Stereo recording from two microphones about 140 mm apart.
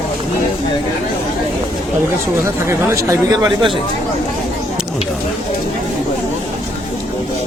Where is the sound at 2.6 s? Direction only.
20° right (ahead or behind).